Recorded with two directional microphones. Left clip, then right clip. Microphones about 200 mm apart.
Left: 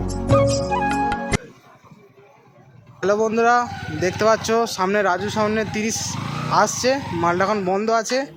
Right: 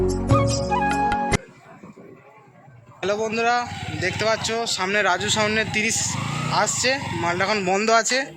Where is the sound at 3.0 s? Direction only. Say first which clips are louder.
Left 4 dB; 30° left (ahead or behind).